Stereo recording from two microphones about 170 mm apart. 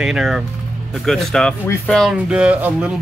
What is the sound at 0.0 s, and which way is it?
Speech, centre (ahead or behind).